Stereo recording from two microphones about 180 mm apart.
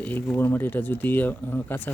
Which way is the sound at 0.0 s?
10° left (ahead or behind).